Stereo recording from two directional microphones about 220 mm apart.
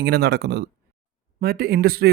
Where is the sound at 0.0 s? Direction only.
45° right (ahead or behind).